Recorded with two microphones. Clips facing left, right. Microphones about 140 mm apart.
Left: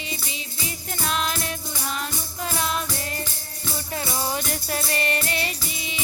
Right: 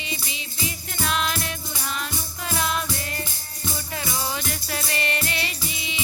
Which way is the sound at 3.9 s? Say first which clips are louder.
Left 3 dB; 40° left (ahead or behind).